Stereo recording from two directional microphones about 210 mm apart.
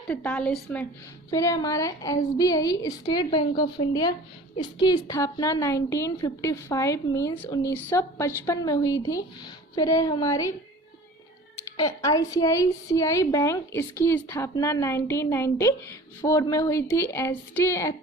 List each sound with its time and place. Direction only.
0.1 s a woman's voice: 5° left (ahead or behind)
11.8 s a woman's voice: 15° left (ahead or behind)